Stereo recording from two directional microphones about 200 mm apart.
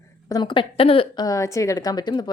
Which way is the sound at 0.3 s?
20° left (ahead or behind).